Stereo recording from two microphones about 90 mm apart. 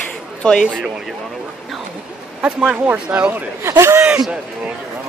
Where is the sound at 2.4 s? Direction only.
10° right (ahead or behind).